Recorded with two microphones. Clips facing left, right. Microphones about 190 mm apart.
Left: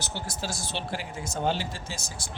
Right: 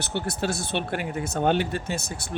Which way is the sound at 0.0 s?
60° right (ahead or behind).